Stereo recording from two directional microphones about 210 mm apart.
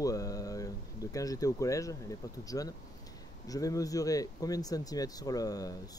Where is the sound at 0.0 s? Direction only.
15° left (ahead or behind).